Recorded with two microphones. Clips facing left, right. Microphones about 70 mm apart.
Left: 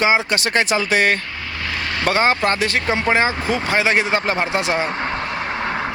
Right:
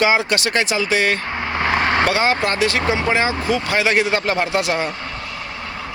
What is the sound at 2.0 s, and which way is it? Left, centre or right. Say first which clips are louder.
Speech: left 1 dB; left.